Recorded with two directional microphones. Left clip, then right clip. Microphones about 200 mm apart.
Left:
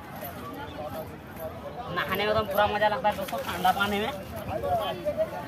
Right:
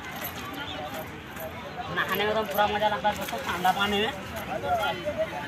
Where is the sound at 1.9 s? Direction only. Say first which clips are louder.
Even; 20° left (ahead or behind).